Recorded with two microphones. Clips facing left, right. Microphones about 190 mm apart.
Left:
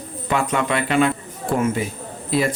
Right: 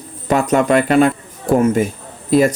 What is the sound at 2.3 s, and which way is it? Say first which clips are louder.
Speech: right 8 dB; 45° right (ahead or behind).